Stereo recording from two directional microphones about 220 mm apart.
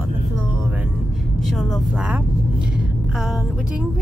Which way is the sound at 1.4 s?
Centre (ahead or behind).